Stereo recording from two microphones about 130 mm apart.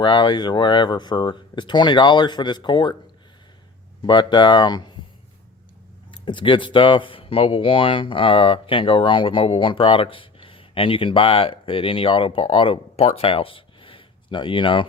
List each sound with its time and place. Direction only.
0.0 s speech: 35° left (ahead or behind)
4.0 s speech: 35° left (ahead or behind)
6.1 s speech: 40° left (ahead or behind)